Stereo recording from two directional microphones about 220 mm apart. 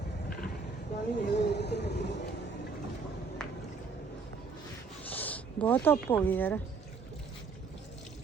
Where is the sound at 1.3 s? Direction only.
50° left (ahead or behind).